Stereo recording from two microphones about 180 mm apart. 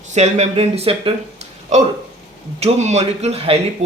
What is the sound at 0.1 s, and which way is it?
Speech, 40° right (ahead or behind).